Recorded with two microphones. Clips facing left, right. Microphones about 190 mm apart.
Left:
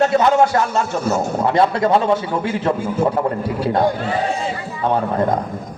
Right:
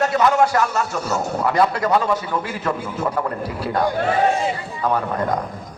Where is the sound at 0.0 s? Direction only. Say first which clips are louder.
Left 3 dB; 25° left (ahead or behind).